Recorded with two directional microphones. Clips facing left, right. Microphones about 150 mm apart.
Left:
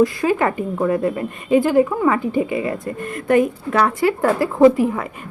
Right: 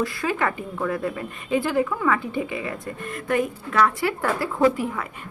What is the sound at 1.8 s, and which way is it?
Speech, 25° left (ahead or behind).